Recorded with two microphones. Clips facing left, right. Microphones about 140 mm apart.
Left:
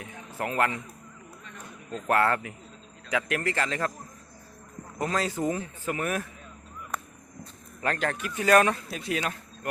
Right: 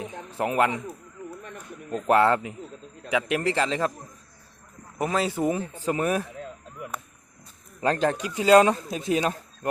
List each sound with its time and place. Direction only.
0.0 s a sound: 20° right (ahead or behind)
1.9 s speech: 20° right (ahead or behind)
4.9 s speech: 15° right (ahead or behind)
7.8 s speech: 25° right (ahead or behind)